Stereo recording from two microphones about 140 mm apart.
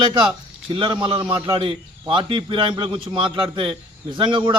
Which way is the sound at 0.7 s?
35° right (ahead or behind).